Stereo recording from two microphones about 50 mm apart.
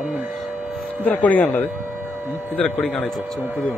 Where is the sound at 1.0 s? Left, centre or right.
Left.